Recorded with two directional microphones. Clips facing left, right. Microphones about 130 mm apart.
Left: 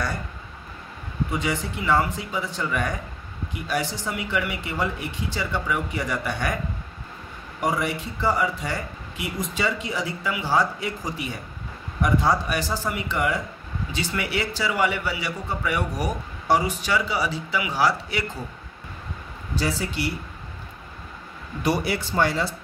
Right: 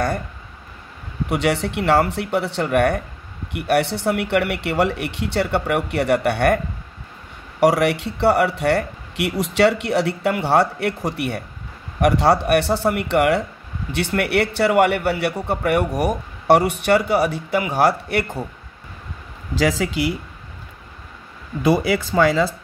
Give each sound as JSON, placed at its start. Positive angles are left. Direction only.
{"t": 1.3, "sound": "a man's voice", "side_deg": -70}
{"t": 7.6, "sound": "a man's voice", "side_deg": -75}
{"t": 19.5, "sound": "speech", "side_deg": -90}